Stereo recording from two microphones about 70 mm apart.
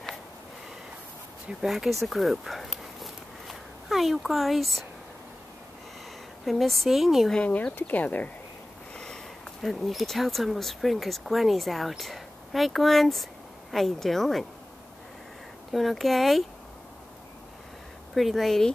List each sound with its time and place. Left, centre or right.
1.6 s speech: centre
6.4 s speech: centre
7.3 s speech: left
8.9 s speech: centre
15.7 s speech: centre
18.1 s speech: centre